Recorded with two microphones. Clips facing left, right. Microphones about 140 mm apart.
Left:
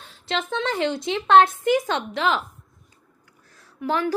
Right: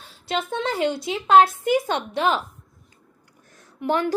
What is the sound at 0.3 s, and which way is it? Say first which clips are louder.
Speech: even; 10° right (ahead or behind).